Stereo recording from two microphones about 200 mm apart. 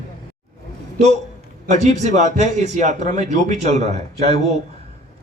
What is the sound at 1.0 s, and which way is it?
A man's voice, 35° right (ahead or behind).